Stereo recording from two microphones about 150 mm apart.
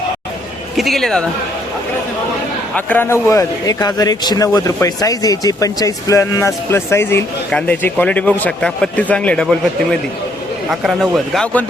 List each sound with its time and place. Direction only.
0.8 s speech: centre (ahead or behind)
2.7 s a man's voice: 10° left (ahead or behind)
10.7 s speech: centre (ahead or behind)